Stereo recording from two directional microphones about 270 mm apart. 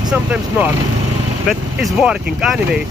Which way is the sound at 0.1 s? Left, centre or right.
Centre.